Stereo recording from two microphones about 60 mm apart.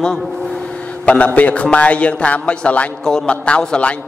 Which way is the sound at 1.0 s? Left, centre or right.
Left.